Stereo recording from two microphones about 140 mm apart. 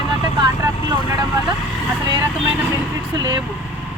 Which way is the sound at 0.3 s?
30° right (ahead or behind).